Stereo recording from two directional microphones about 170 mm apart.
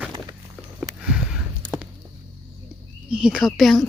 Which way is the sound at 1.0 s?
5° right (ahead or behind).